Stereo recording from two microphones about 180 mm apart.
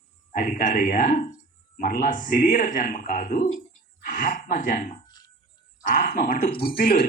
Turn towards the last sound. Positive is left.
turn(degrees=55)  # may be behind; listen again after turning